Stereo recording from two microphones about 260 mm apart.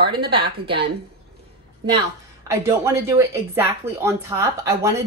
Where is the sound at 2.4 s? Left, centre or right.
Centre.